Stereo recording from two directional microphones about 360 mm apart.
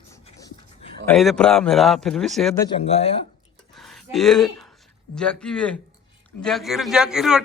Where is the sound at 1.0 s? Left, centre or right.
Centre.